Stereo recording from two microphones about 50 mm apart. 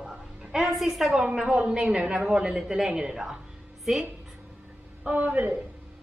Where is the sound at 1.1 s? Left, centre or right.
Centre.